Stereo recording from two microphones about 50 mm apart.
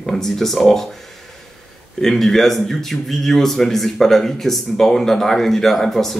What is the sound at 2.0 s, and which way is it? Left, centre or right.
A man's voice, centre.